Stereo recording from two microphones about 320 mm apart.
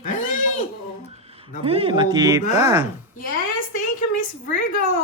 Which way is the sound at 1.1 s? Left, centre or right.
Centre.